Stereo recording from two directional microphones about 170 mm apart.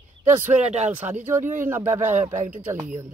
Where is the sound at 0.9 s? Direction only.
10° right (ahead or behind).